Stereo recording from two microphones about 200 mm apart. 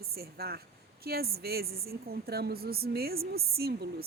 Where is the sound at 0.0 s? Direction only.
50° right (ahead or behind).